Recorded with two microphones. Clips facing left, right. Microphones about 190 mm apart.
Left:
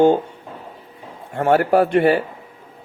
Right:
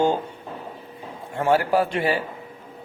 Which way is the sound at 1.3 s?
55° left (ahead or behind).